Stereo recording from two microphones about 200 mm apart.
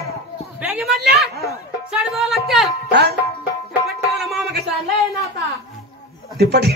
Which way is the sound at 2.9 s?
55° right (ahead or behind).